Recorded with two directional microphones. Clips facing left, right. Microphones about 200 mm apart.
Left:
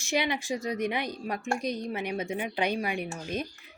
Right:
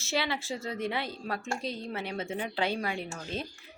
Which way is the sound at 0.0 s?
15° left (ahead or behind).